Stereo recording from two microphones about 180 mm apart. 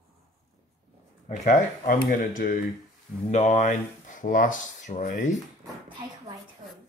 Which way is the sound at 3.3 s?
40° left (ahead or behind).